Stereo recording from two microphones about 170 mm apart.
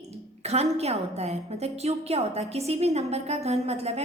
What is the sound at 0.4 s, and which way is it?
A woman's voice, 40° right (ahead or behind).